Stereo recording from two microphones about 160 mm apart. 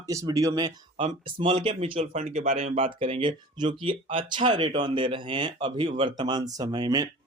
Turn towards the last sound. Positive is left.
turn(degrees=-25)  # may be behind; listen again after turning